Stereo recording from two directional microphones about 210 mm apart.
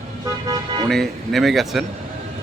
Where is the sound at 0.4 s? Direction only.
20° right (ahead or behind).